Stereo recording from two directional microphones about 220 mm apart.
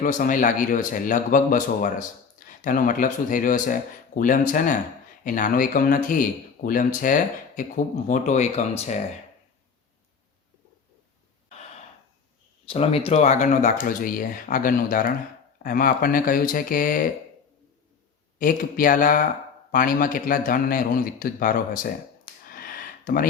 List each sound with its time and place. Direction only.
0.0 s speech: 40° left (ahead or behind)
12.6 s speech: 25° left (ahead or behind)
18.3 s speech: 40° left (ahead or behind)
22.4 s a sound: 40° left (ahead or behind)